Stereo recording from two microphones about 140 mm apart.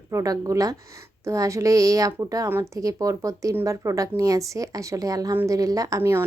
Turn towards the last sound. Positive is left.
turn(degrees=-20)  # may be behind; listen again after turning